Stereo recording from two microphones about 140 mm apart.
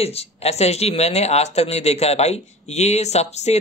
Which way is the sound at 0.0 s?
45° left (ahead or behind).